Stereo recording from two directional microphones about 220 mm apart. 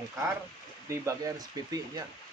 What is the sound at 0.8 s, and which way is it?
Speech, 15° right (ahead or behind).